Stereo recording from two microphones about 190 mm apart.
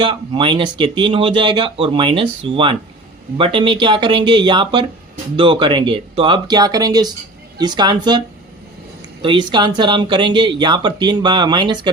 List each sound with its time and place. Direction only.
0.0 s speech: 25° right (ahead or behind)
9.2 s speech: 25° right (ahead or behind)